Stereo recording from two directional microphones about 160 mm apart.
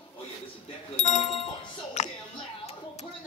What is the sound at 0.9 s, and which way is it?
Bicycle bell, 45° left (ahead or behind).